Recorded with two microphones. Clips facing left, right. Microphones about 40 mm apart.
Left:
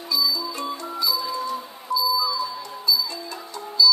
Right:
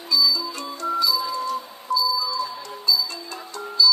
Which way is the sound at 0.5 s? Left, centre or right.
Left.